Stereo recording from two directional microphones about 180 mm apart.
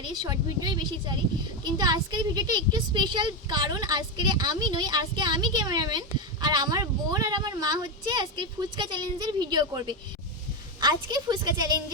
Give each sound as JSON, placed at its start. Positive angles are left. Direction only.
{"t": 0.2, "sound": "speech", "side_deg": -20}